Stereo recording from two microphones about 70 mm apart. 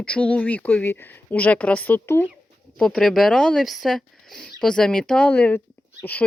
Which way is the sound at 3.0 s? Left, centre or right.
Centre.